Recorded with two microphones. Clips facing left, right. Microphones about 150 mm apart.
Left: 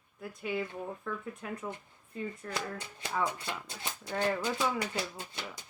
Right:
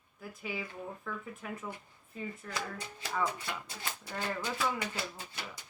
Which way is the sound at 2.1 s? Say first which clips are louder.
Left 3 dB; 5° right (ahead or behind).